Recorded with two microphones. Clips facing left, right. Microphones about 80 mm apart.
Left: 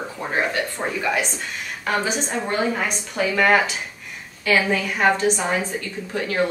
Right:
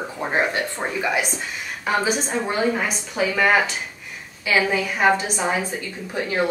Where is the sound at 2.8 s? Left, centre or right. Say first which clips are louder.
Even; centre.